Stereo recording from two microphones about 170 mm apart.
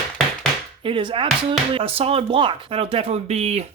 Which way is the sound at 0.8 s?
30° right (ahead or behind).